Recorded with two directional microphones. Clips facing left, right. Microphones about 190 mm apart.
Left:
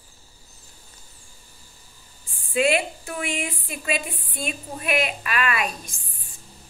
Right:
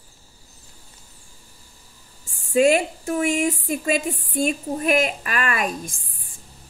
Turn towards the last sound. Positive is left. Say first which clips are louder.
# right 2 dB
turn(degrees=-45)  # may be behind; listen again after turning